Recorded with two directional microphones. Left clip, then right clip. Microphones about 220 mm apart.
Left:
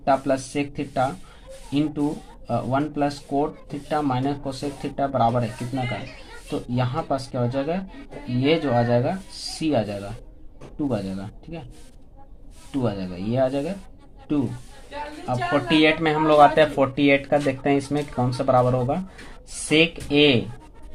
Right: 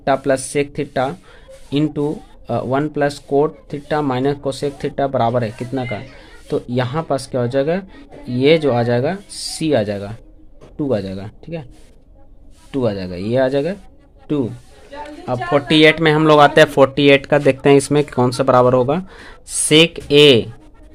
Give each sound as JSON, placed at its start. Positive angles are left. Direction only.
{"t": 0.0, "sound": "speech", "side_deg": -50}
{"t": 12.7, "sound": "speech", "side_deg": -50}
{"t": 15.3, "sound": "speech", "side_deg": -50}